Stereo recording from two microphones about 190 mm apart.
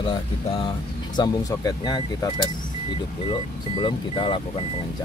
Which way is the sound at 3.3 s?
25° left (ahead or behind).